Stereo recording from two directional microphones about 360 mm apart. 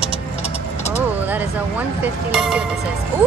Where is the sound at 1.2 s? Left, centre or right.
Centre.